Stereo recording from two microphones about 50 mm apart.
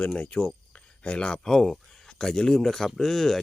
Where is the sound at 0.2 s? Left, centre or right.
Left.